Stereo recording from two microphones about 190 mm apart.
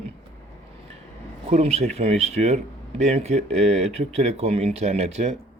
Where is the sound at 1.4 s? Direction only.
35° right (ahead or behind).